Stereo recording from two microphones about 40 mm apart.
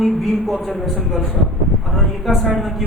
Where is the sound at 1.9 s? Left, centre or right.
Centre.